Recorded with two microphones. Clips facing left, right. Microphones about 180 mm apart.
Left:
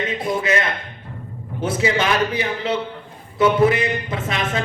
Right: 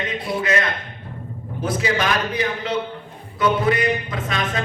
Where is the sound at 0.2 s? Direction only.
45° left (ahead or behind).